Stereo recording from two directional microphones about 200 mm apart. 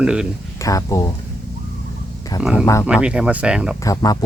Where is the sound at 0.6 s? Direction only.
15° left (ahead or behind).